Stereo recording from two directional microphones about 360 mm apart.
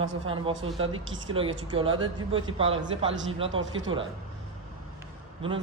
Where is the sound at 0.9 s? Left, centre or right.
Centre.